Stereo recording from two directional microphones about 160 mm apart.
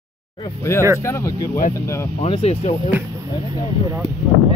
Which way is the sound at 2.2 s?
35° left (ahead or behind).